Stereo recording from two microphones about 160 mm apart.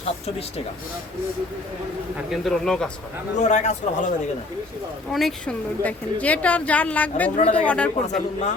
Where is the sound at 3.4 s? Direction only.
45° left (ahead or behind).